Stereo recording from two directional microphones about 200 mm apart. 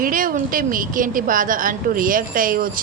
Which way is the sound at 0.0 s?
45° right (ahead or behind).